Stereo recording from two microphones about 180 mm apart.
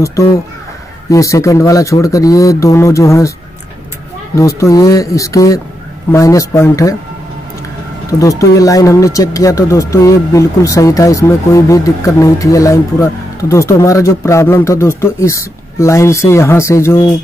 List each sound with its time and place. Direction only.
0.0 s speech: 15° left (ahead or behind)
4.4 s speech: 15° left (ahead or behind)
8.1 s speech: 20° left (ahead or behind)